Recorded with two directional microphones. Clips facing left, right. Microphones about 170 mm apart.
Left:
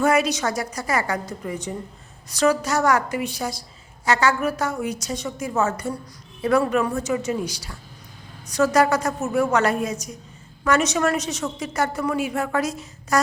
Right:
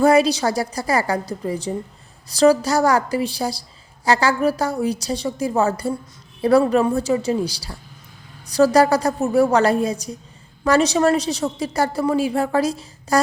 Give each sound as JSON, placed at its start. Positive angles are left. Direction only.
{"t": 0.0, "sound": "a woman's voice", "side_deg": -30}